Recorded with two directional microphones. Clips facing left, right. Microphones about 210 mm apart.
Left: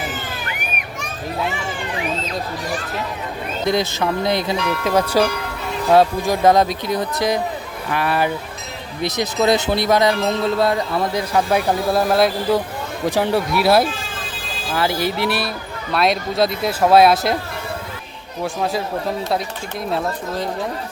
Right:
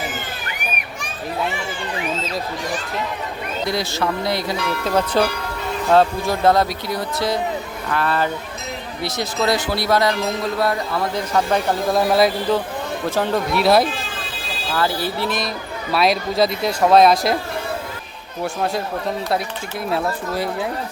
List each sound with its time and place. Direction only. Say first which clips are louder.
3.7 s speech: left 4 dB; 20° left (ahead or behind)
4.9 s speech: left 1 dB; 10° left (ahead or behind)
11.3 s speech: left 1 dB; 10° left (ahead or behind)
13.1 s speech: left 3 dB; 15° left (ahead or behind)
13.5 s speech: right 1 dB; 5° left (ahead or behind)
14.8 s speech: left 2 dB; 15° left (ahead or behind)
15.9 s speech: even; centre (ahead or behind)
18.4 s speech: even; centre (ahead or behind)
19.9 s speech: right 1 dB; 5° right (ahead or behind)